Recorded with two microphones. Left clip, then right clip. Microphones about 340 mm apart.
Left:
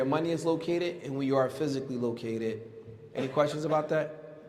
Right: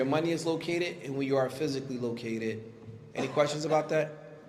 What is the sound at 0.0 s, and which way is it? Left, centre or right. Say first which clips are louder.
A man's voice: even; left.